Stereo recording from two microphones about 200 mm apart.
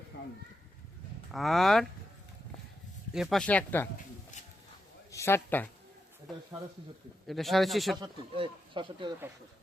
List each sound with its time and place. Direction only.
0.1 s children playing: 60° left (ahead or behind)
1.3 s speech: centre (ahead or behind)
3.1 s speech: centre (ahead or behind)
5.1 s speech: 10° left (ahead or behind)
7.3 s speech: centre (ahead or behind)
7.9 s speech: 25° right (ahead or behind)